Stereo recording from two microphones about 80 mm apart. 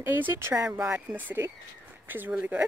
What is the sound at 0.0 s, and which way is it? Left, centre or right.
Speech, right.